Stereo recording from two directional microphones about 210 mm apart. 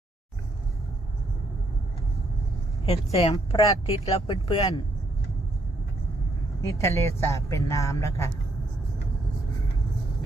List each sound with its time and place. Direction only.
2.8 s speech: 30° left (ahead or behind)
6.6 s a woman's voice: 15° left (ahead or behind)